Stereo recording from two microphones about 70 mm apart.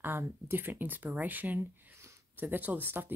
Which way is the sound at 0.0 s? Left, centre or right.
Right.